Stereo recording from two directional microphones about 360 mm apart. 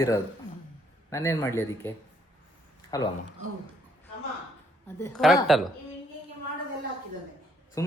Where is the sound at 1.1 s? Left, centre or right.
Centre.